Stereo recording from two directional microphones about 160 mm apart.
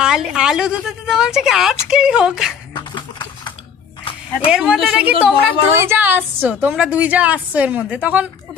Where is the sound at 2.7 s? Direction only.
30° left (ahead or behind).